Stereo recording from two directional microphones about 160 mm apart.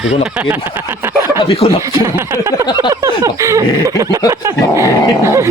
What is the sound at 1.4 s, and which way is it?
Speech, 35° left (ahead or behind).